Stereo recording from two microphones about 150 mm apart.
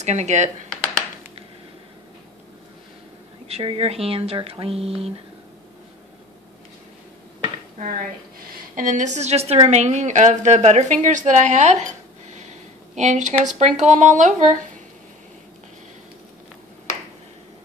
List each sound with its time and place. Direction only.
0.0 s a woman's voice: 50° right (ahead or behind)
3.4 s speech: 40° right (ahead or behind)
8.7 s a woman's voice: 60° right (ahead or behind)
12.3 s a sound: 50° right (ahead or behind)
13.5 s a woman's voice: 50° right (ahead or behind)